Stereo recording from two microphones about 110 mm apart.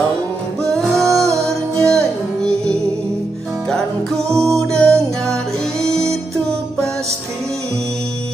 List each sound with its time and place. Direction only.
0.9 s music: 30° right (ahead or behind)
1.8 s music: 5° left (ahead or behind)
3.7 s music: 5° left (ahead or behind)